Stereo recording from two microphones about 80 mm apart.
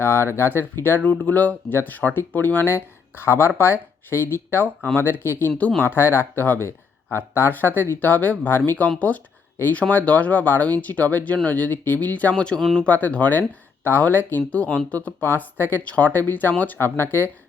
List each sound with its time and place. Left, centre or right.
0.0 s speech: left
5.5 s speech: centre